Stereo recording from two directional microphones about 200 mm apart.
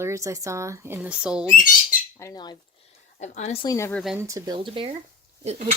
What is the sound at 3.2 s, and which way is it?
Speech, 35° left (ahead or behind).